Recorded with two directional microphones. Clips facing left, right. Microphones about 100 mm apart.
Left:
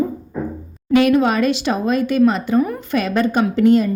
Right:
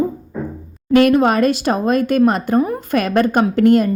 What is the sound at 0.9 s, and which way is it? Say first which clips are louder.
A woman's voice: right 2 dB; 45° right (ahead or behind).